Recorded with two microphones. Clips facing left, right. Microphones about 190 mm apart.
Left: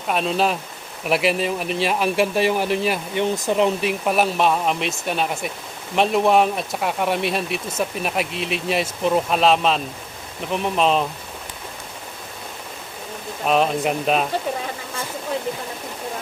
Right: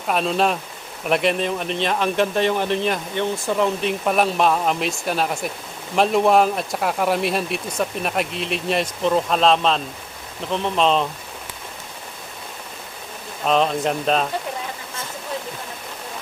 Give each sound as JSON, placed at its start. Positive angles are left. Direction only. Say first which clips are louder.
{"t": 0.1, "sound": "speech", "louder": "right 1 dB", "side_deg": 0}
{"t": 3.3, "sound": "speech", "louder": "left 2 dB", "side_deg": 20}
{"t": 3.8, "sound": "speech", "louder": "even", "side_deg": 5}
{"t": 13.4, "sound": "speech", "louder": "even", "side_deg": 5}